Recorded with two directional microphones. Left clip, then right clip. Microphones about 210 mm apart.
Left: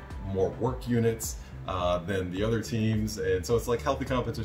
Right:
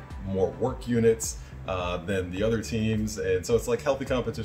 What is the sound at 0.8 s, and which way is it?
Speech, 20° right (ahead or behind).